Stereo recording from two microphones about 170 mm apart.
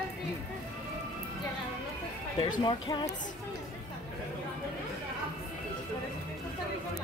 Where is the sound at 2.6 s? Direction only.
25° left (ahead or behind).